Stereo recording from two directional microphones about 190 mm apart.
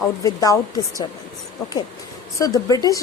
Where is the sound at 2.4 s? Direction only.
20° left (ahead or behind).